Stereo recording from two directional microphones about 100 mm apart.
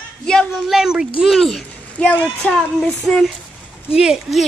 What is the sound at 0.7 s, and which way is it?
A woman's voice, 5° right (ahead or behind).